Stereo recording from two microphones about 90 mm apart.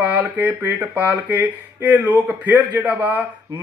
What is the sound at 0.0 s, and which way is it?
Speech, 20° right (ahead or behind).